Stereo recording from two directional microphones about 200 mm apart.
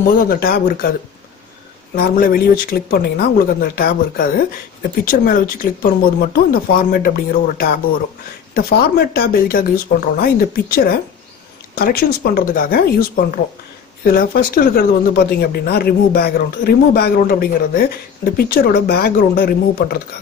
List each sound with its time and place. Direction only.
0.0 s speech: 50° left (ahead or behind)
2.0 s speech: 45° left (ahead or behind)